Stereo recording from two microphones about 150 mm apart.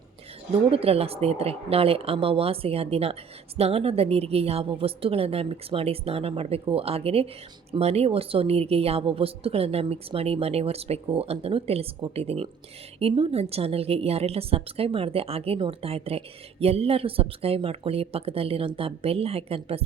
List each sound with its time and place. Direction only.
0.5 s a woman's voice: 40° right (ahead or behind)